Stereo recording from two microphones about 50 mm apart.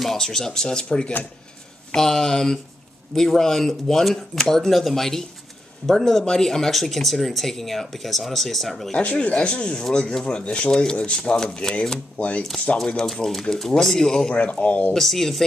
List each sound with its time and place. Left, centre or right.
0.0 s speech: centre
2.0 s speech: centre
9.0 s speech: left
12.2 s speech: left
12.7 s speech: centre
14.3 s speech: left
15.0 s speech: centre